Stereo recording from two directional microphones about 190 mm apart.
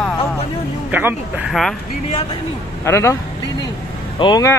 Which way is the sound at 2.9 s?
15° left (ahead or behind).